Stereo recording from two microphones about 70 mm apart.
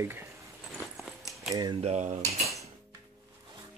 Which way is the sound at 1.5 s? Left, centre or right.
Right.